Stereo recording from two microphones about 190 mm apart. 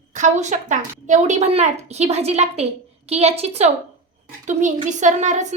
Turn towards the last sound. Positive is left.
turn(degrees=-40)  # may be behind; listen again after turning